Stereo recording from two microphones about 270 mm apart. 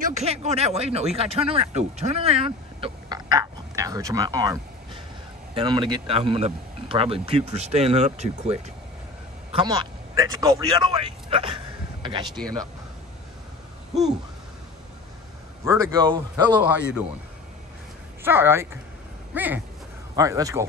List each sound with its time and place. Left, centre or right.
0.0 s speech: right
12.0 s a sound: centre
15.6 s a man's voice: centre
16.6 s speech: centre
18.2 s a man's voice: centre